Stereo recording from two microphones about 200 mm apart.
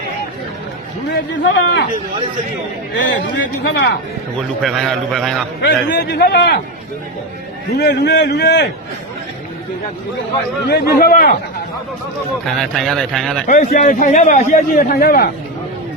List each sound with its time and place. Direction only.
1.3 s a man's voice: 65° left (ahead or behind)
2.9 s a man's voice: 65° left (ahead or behind)
4.6 s speech: centre (ahead or behind)
5.6 s a man's voice: 55° left (ahead or behind)
7.8 s a man's voice: 55° left (ahead or behind)
10.7 s a man's voice: 50° left (ahead or behind)
12.5 s speech: centre (ahead or behind)
13.5 s a man's voice: 45° left (ahead or behind)